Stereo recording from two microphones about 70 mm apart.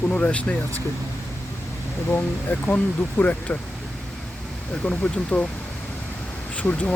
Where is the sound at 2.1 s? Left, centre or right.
Left.